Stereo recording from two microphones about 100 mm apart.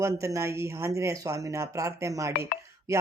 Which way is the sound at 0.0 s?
30° right (ahead or behind).